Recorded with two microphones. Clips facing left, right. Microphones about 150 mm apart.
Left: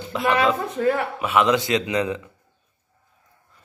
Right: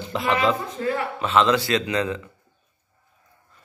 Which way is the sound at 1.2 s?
10° left (ahead or behind).